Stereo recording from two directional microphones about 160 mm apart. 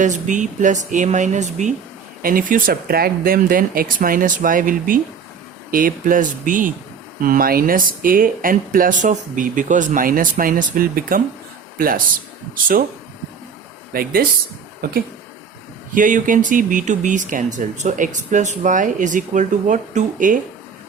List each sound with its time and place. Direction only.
0.0 s speech: 50° right (ahead or behind)
2.2 s speech: 60° right (ahead or behind)
13.9 s speech: 65° right (ahead or behind)
16.0 s speech: 55° right (ahead or behind)